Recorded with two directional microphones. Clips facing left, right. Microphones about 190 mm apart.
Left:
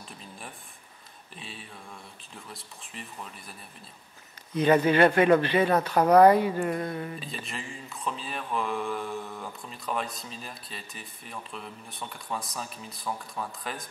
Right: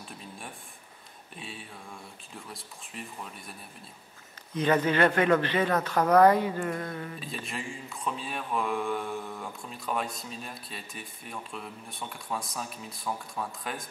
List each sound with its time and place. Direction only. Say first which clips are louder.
2.5 s speech: right 1 dB; centre (ahead or behind)
4.6 s speech: left 4 dB; 15° left (ahead or behind)
5.7 s speech: left 2 dB; 30° left (ahead or behind)
6.2 s speech: left 2 dB; 15° left (ahead or behind)
6.7 s speech: left 3 dB; 25° left (ahead or behind)
7.2 s speech: right 1 dB; centre (ahead or behind)